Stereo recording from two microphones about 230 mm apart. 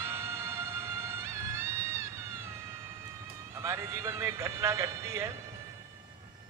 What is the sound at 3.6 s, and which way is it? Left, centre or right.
Speech, centre.